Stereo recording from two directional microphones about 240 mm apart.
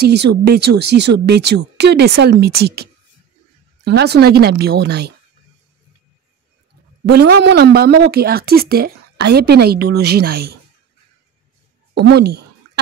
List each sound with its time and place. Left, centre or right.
0.0 s speech: right
7.3 s speech: right
11.9 s speech: right